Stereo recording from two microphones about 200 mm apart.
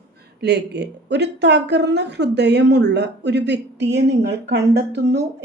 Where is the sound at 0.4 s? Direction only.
55° right (ahead or behind).